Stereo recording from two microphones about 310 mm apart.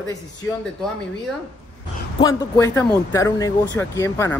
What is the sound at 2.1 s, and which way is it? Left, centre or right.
Speech, centre.